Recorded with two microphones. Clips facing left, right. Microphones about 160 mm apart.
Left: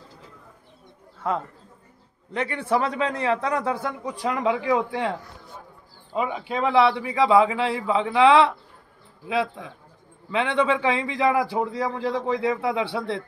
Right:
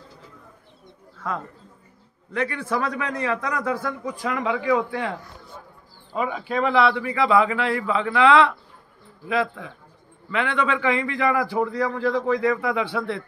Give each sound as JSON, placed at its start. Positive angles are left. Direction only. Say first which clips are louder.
{"t": 2.3, "sound": "a man's voice", "louder": "left 1 dB", "side_deg": 25}
{"t": 6.1, "sound": "a man's voice", "louder": "right 1 dB", "side_deg": 20}
{"t": 10.3, "sound": "a man's voice", "louder": "left 2 dB", "side_deg": 25}